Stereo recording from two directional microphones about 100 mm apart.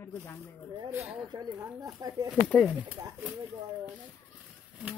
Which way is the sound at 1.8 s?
40° right (ahead or behind).